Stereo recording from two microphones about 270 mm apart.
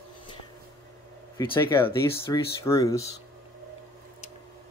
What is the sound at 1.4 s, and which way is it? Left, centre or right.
Speech, centre.